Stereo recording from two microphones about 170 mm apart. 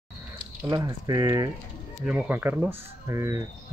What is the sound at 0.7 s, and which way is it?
Speech, 20° right (ahead or behind).